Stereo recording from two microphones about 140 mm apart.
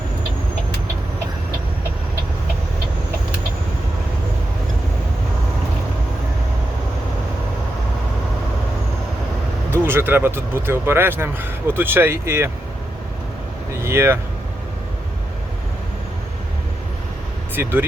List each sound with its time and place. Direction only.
9.7 s speech: 15° right (ahead or behind)
13.8 s speech: 20° right (ahead or behind)
17.5 s speech: 15° right (ahead or behind)